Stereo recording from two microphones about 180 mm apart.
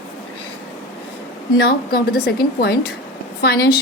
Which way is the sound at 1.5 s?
65° left (ahead or behind).